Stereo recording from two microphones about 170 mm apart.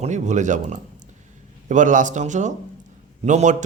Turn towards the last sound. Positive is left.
turn(degrees=-45)  # may be behind; listen again after turning